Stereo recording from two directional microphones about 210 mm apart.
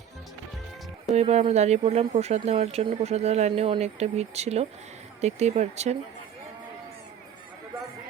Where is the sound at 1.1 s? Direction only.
30° right (ahead or behind).